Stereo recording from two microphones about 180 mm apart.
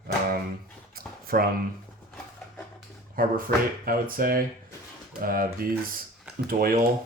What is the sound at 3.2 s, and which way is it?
Speech, 50° right (ahead or behind).